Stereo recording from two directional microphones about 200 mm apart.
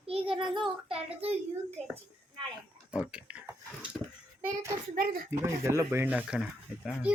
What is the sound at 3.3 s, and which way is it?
Speech, 5° right (ahead or behind).